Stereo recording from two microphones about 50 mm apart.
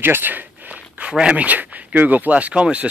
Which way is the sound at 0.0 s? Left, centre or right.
Right.